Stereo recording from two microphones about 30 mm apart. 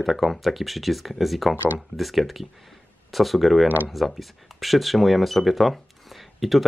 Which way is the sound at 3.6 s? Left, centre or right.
Right.